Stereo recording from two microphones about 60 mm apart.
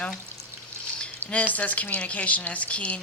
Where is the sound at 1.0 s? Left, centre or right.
Left.